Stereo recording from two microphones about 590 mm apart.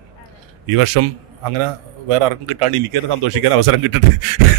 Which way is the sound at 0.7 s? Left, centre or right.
Right.